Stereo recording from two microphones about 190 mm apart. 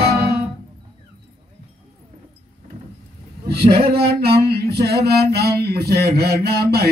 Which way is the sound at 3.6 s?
30° right (ahead or behind).